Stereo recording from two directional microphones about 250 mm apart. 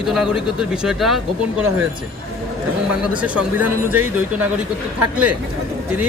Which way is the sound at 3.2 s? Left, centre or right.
Centre.